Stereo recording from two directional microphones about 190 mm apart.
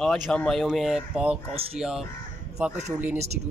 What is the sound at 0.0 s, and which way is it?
Speech, 5° left (ahead or behind).